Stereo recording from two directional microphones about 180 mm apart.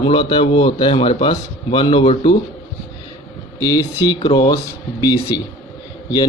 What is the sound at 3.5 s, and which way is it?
A man's voice, 20° left (ahead or behind).